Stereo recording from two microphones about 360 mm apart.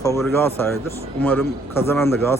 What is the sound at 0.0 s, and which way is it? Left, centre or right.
A man's voice, centre.